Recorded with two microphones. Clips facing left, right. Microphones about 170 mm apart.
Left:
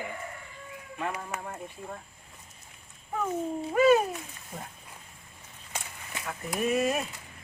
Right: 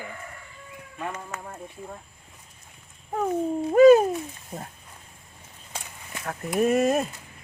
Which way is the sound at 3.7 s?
40° right (ahead or behind).